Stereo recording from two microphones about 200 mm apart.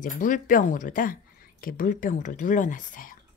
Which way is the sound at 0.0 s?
40° left (ahead or behind).